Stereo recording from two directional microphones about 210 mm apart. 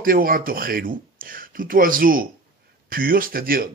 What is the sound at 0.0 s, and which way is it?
Speech, 45° right (ahead or behind).